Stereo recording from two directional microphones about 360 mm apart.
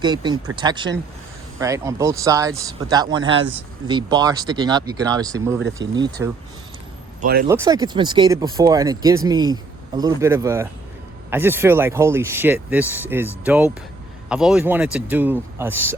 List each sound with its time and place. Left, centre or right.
0.0 s speech: centre
7.2 s speech: right
7.4 s speech: centre